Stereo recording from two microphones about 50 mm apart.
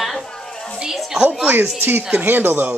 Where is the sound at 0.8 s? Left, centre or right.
Centre.